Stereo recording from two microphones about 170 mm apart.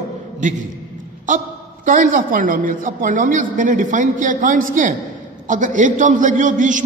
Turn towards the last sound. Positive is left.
turn(degrees=-50)  # may be behind; listen again after turning